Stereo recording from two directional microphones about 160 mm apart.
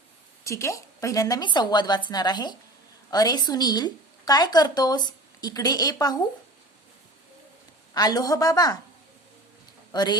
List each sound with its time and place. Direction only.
0.4 s a woman's voice: 20° left (ahead or behind)
7.9 s a woman's voice: 25° left (ahead or behind)
9.9 s a man's voice: 25° left (ahead or behind)